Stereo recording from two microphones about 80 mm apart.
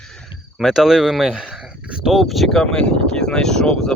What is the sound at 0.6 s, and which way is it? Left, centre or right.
Speech, centre.